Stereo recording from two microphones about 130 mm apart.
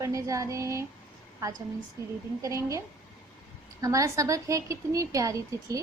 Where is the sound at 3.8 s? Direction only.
25° right (ahead or behind).